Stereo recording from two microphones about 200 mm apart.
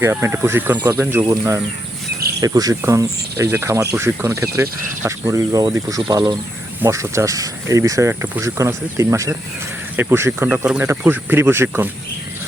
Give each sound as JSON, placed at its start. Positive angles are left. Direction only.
{"t": 0.0, "sound": "speech", "side_deg": -10}